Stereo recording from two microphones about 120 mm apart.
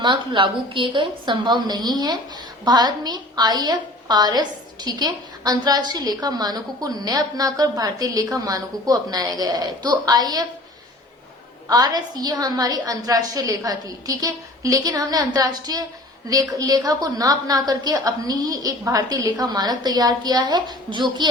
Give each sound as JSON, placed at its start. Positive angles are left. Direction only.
{"t": 0.0, "sound": "a woman's voice", "side_deg": -40}
{"t": 11.7, "sound": "a woman's voice", "side_deg": -35}